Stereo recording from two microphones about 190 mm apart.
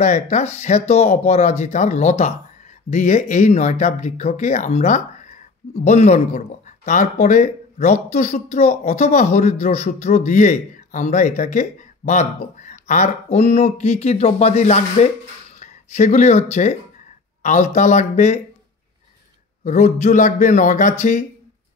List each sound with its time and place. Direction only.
0.0 s speech: 40° left (ahead or behind)
19.6 s speech: 40° left (ahead or behind)